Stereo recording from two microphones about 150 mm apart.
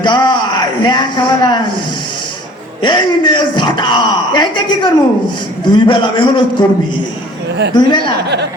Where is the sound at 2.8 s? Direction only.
30° left (ahead or behind).